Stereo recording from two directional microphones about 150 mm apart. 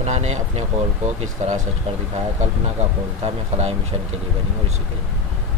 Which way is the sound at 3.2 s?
45° right (ahead or behind).